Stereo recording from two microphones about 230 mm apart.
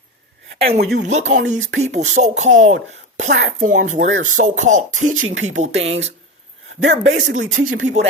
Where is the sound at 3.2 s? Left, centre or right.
Right.